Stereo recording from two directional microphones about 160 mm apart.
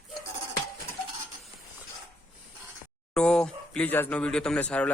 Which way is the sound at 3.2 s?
5° left (ahead or behind).